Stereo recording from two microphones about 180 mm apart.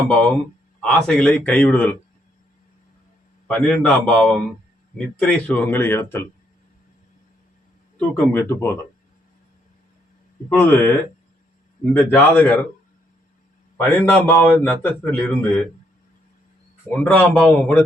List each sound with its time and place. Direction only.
0.8 s a man's voice: 5° left (ahead or behind)
3.4 s a man's voice: 5° left (ahead or behind)
7.9 s a man's voice: 10° left (ahead or behind)
10.5 s a man's voice: 10° left (ahead or behind)
11.9 s a man's voice: 10° left (ahead or behind)
13.7 s a man's voice: 10° left (ahead or behind)
16.9 s a man's voice: 5° left (ahead or behind)